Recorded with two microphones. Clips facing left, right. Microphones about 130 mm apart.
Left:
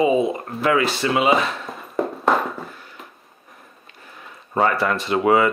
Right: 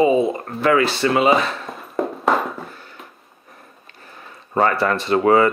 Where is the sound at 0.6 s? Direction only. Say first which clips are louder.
Right 3 dB; 30° right (ahead or behind).